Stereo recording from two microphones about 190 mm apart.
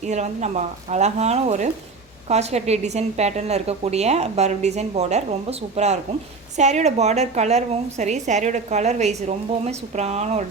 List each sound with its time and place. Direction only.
0.0 s a woman's voice: 35° right (ahead or behind)